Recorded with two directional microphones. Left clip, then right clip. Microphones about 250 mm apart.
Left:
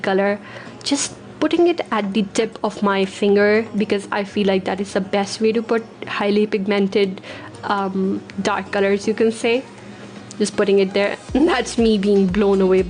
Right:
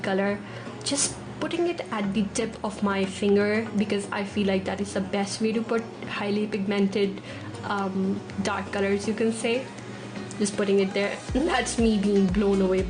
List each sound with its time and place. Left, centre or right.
0.0 s a woman's voice: left